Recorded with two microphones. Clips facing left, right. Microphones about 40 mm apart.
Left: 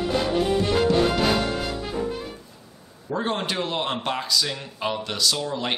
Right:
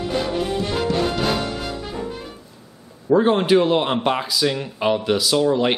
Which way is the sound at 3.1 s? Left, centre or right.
Centre.